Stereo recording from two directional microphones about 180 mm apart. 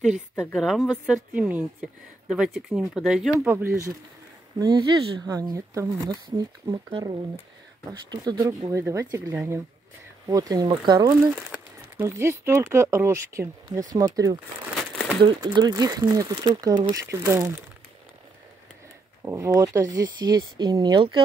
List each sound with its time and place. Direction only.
0.4 s a woman's voice: 5° left (ahead or behind)
3.6 s speech: 15° right (ahead or behind)
19.2 s speech: 15° right (ahead or behind)